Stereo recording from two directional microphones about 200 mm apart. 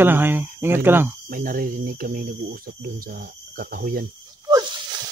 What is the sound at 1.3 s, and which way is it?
Speech, 45° right (ahead or behind).